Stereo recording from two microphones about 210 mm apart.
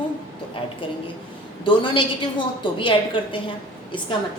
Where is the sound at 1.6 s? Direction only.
25° left (ahead or behind).